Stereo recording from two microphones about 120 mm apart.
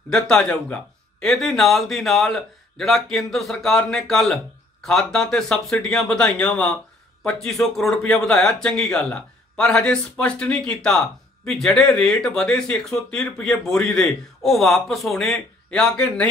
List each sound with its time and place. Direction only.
0.1 s speech: 5° left (ahead or behind)